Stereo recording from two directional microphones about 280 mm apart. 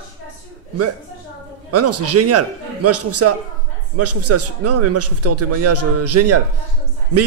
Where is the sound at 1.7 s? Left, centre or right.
Right.